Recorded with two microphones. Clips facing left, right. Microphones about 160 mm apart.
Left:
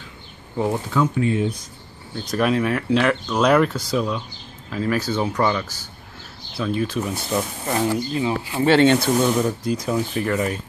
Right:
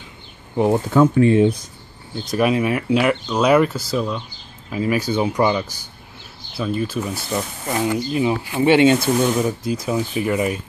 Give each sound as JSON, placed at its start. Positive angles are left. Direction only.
{"t": 0.8, "sound": "speech", "side_deg": -50}
{"t": 2.2, "sound": "speech", "side_deg": -5}
{"t": 6.5, "sound": "speech", "side_deg": -5}
{"t": 8.1, "sound": "speech", "side_deg": -20}